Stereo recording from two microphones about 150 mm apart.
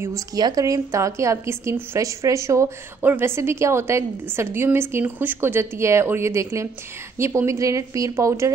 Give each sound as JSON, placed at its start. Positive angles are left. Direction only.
{"t": 0.0, "sound": "speech", "side_deg": -20}